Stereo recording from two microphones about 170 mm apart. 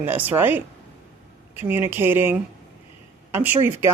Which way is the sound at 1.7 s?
10° right (ahead or behind).